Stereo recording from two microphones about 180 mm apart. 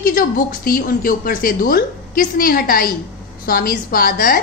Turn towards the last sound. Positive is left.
turn(degrees=55)  # may be behind; listen again after turning